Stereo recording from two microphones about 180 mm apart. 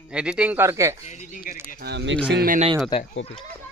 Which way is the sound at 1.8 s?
80° right.